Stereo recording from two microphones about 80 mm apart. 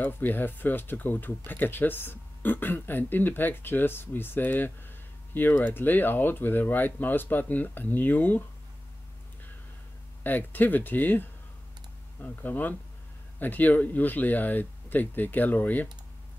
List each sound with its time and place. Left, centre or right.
0.0 s speech: left
10.2 s speech: left